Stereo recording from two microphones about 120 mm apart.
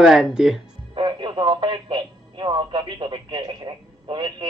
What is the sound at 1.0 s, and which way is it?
Speech, 40° right (ahead or behind).